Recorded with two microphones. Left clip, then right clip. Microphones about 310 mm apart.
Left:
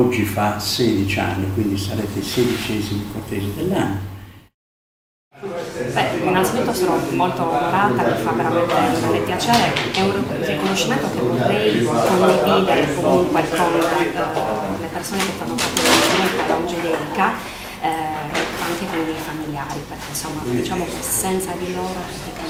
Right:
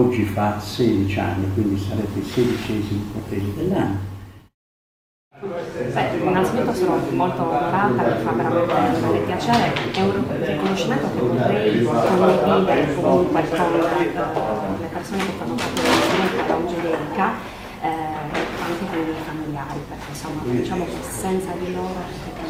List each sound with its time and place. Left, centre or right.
0.1 s a man's voice: centre
5.9 s a sound: centre
7.3 s a man's voice: centre
11.3 s a man's voice: centre
13.1 s a man's voice: right
13.3 s a man's voice: centre
17.8 s music: centre
20.6 s a man's voice: centre